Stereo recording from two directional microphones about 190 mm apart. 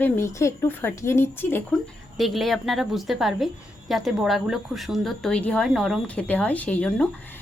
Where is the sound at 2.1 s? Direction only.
Centre (ahead or behind).